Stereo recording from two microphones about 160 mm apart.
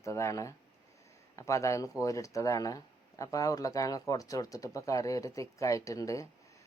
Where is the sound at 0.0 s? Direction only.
20° left (ahead or behind).